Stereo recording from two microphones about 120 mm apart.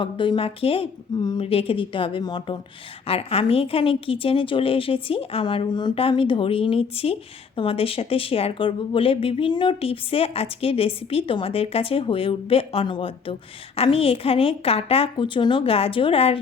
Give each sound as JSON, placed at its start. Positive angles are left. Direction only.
{"t": 0.0, "sound": "speech", "side_deg": 45}
{"t": 1.1, "sound": "a woman's voice", "side_deg": 35}
{"t": 1.5, "sound": "speech", "side_deg": 50}
{"t": 3.1, "sound": "speech", "side_deg": 55}
{"t": 6.0, "sound": "speech", "side_deg": 50}